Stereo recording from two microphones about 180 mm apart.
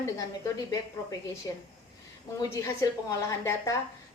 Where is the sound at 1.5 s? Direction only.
15° left (ahead or behind).